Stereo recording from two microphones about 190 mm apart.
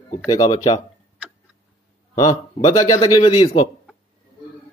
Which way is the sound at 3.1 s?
25° left (ahead or behind).